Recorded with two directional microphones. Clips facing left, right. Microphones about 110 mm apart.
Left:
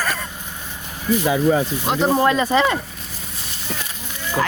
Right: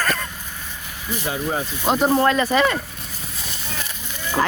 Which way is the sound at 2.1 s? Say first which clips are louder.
Left 4 dB; 15° left (ahead or behind).